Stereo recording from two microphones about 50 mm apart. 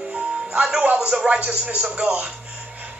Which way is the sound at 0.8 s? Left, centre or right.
Right.